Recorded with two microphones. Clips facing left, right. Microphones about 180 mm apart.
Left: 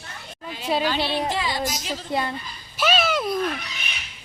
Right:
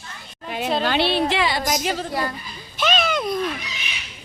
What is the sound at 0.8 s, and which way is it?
A woman's voice, 70° right (ahead or behind).